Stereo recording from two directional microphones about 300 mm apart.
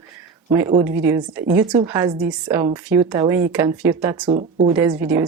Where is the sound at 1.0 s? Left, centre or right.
Centre.